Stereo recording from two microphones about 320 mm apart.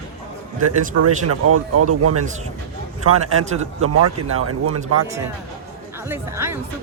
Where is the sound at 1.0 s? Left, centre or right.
Right.